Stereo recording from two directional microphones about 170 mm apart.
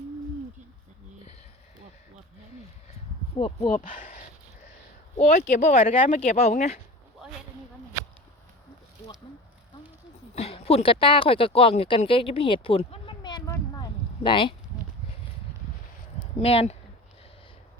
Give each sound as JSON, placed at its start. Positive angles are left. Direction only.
{"t": 3.3, "sound": "speech", "side_deg": 30}
{"t": 3.7, "sound": "speech", "side_deg": 55}
{"t": 5.2, "sound": "speech", "side_deg": 45}
{"t": 6.1, "sound": "speech", "side_deg": 40}
{"t": 10.3, "sound": "speech", "side_deg": 35}
{"t": 16.4, "sound": "speech", "side_deg": 35}